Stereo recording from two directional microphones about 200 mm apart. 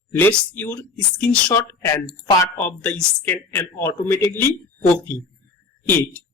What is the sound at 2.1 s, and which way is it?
Speech, 25° left (ahead or behind).